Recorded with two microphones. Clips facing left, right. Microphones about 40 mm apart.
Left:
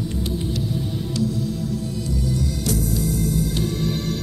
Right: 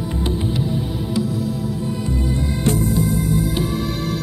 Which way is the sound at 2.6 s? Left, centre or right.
Right.